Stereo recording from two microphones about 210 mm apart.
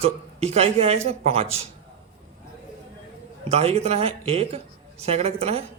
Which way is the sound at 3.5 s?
30° right (ahead or behind).